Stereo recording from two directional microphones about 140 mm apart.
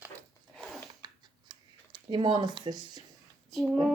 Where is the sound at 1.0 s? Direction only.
30° right (ahead or behind).